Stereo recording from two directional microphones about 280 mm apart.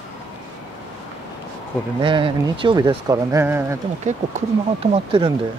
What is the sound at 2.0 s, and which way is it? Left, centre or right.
Speech, centre.